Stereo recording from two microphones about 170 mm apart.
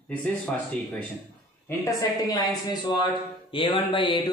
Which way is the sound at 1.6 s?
20° left (ahead or behind).